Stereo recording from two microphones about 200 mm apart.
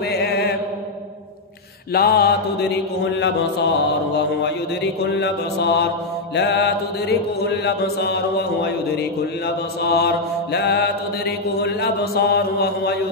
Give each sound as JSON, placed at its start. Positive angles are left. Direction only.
{"t": 0.1, "sound": "mantra", "side_deg": 55}
{"t": 2.0, "sound": "mantra", "side_deg": 50}
{"t": 5.2, "sound": "mantra", "side_deg": 55}